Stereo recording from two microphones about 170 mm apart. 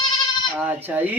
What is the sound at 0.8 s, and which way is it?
Speech, 10° right (ahead or behind).